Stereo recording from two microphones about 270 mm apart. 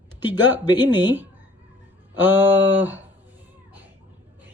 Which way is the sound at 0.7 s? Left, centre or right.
Centre.